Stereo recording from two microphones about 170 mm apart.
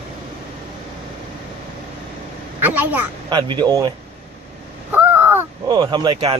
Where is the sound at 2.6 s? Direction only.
10° right (ahead or behind).